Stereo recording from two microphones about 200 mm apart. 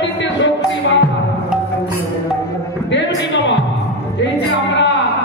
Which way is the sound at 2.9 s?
65° left (ahead or behind).